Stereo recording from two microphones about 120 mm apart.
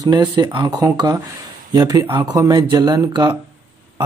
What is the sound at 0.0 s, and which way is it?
Speech, 40° right (ahead or behind).